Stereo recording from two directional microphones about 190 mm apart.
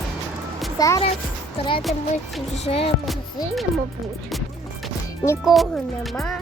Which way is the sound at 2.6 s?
30° left (ahead or behind).